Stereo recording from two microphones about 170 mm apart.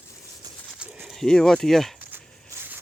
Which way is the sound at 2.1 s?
15° right (ahead or behind).